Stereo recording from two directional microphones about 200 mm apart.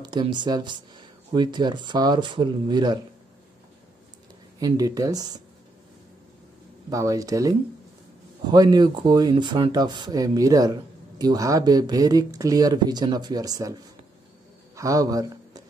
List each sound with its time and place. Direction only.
0.0 s speech: 20° right (ahead or behind)
4.6 s speech: 15° right (ahead or behind)
6.9 s speech: 15° right (ahead or behind)
14.8 s a man's voice: 15° right (ahead or behind)